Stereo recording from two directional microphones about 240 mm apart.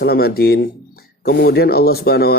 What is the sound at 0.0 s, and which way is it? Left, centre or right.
Speech, left.